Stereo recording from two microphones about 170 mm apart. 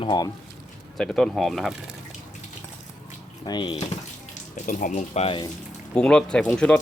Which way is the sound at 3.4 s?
25° left (ahead or behind).